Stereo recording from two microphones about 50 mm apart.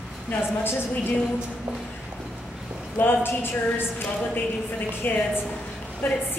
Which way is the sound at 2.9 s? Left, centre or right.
Left.